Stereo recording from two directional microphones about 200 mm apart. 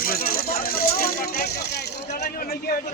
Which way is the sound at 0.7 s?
50° left (ahead or behind).